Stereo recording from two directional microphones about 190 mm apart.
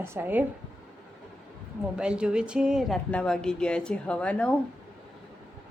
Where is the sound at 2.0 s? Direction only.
5° right (ahead or behind).